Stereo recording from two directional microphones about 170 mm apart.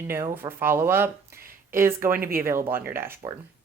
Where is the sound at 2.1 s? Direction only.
60° right (ahead or behind).